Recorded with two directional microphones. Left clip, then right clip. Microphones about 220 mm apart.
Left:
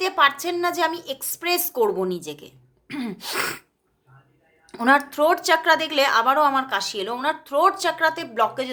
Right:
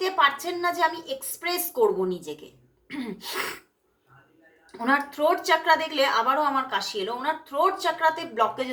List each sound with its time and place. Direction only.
0.0 s a woman's voice: 40° left (ahead or behind)
4.7 s a woman's voice: 45° left (ahead or behind)